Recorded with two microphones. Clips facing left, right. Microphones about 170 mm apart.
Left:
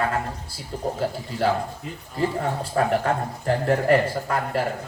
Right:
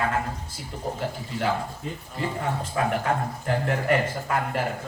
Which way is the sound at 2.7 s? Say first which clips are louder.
Left 4 dB; 40° left (ahead or behind).